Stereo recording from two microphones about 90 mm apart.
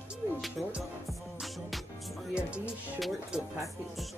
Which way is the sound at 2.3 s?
15° right (ahead or behind).